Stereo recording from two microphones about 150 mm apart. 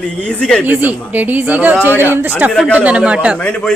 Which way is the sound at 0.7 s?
10° right (ahead or behind).